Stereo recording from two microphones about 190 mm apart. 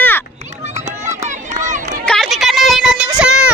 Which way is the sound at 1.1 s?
40° right (ahead or behind).